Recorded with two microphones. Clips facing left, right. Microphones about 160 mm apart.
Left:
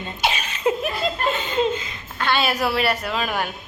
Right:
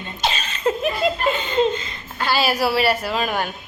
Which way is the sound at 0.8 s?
Centre (ahead or behind).